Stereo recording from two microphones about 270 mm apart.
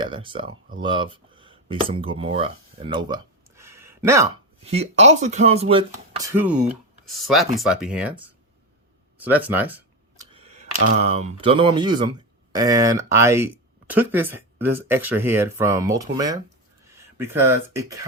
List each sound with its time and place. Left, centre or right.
0.0 s speech: centre
4.6 s speech: right; by 8.3 s centre
9.1 s a sound: centre
10.3 s speech: right